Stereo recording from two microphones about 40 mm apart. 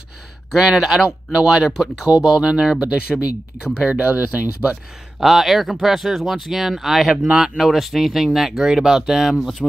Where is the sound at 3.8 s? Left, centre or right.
Right.